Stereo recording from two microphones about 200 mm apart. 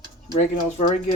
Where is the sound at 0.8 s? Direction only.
35° left (ahead or behind).